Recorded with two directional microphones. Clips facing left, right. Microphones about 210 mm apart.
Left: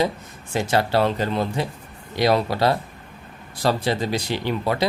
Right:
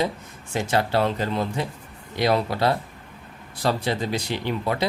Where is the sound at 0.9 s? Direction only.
70° left (ahead or behind).